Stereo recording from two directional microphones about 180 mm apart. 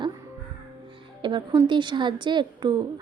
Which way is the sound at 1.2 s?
25° right (ahead or behind).